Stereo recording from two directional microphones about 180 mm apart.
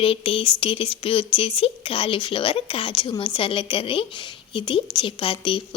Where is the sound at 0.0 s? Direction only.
30° left (ahead or behind).